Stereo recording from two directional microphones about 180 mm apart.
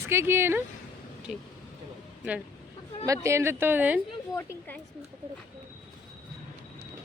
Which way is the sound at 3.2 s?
15° right (ahead or behind).